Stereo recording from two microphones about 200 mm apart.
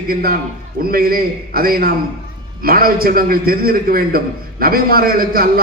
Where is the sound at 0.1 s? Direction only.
45° right (ahead or behind).